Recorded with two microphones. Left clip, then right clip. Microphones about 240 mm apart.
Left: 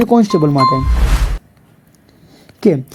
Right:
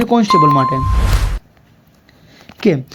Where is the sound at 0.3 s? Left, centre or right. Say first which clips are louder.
Right 2 dB; centre.